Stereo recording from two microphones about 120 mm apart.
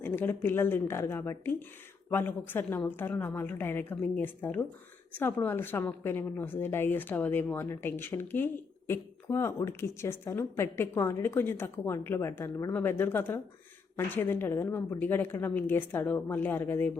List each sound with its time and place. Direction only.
0.0 s a woman's voice: 20° left (ahead or behind)